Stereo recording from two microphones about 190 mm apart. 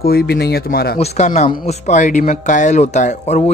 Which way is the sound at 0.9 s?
35° left (ahead or behind).